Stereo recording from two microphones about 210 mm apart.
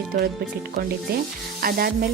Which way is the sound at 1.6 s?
45° right (ahead or behind).